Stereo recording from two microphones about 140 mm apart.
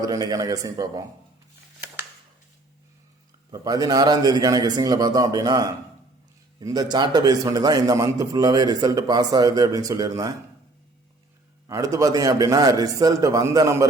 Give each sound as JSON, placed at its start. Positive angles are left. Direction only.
{"t": 0.0, "sound": "a man's voice", "side_deg": -25}
{"t": 3.5, "sound": "a man's voice", "side_deg": -25}
{"t": 11.7, "sound": "a man's voice", "side_deg": -25}